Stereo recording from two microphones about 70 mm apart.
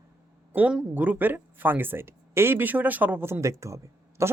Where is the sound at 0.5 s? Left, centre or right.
Centre.